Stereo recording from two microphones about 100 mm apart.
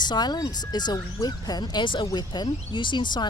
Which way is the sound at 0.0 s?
45° left (ahead or behind).